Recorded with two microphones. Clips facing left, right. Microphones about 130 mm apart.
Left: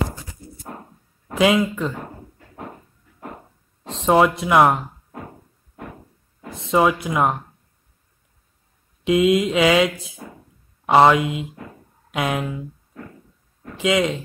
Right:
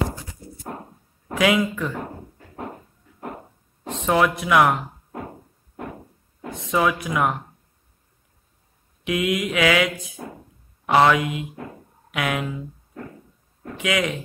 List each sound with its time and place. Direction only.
1.4 s speech: 20° left (ahead or behind)
4.0 s speech: 30° left (ahead or behind)
6.7 s speech: 25° left (ahead or behind)
9.0 s speech: 25° left (ahead or behind)
13.7 s speech: 25° left (ahead or behind)